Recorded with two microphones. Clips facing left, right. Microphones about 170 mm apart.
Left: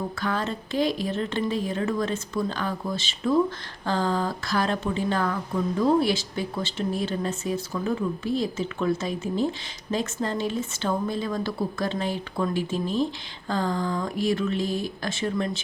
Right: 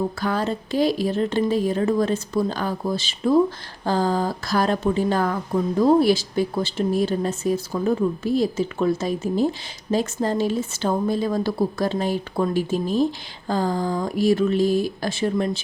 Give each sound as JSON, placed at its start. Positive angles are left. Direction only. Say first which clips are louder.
{"t": 0.2, "sound": "speech", "louder": "right 4 dB", "side_deg": -35}